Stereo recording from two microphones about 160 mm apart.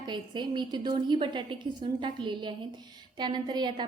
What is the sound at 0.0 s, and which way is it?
A woman's voice, 30° right (ahead or behind).